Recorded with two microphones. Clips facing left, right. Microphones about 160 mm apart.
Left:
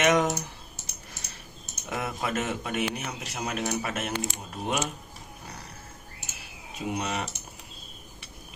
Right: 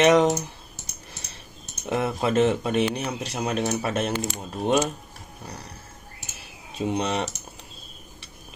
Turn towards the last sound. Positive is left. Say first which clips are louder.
# right 6 dB
turn(degrees=-30)  # may be behind; listen again after turning